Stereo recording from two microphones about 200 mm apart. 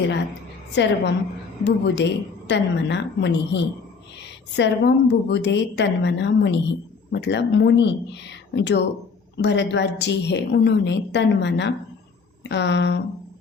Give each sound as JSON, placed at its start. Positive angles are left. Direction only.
{"t": 0.7, "sound": "a woman's voice", "side_deg": 60}